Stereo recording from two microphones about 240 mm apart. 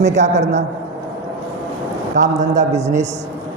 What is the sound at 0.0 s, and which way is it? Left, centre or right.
Speech, right.